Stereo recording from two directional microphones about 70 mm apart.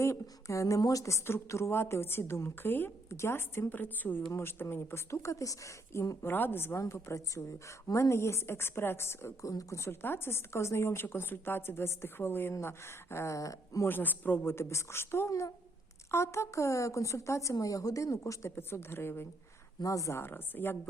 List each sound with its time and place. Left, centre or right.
0.0 s speech: left
4.3 s speech: left
6.3 s speech: left
9.4 s speech: left
13.3 s a woman's voice: left
13.8 s speech: left
15.3 s a woman's voice: left
19.8 s a woman's voice: left
20.1 s speech: left